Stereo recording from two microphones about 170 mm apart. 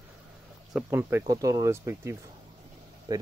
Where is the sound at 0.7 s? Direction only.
15° right (ahead or behind).